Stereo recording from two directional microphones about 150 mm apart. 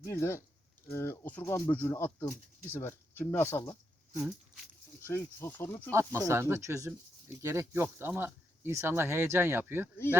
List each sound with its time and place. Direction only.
0.0 s speech: 15° left (ahead or behind)
5.0 s speech: 15° left (ahead or behind)
5.9 s speech: 20° right (ahead or behind)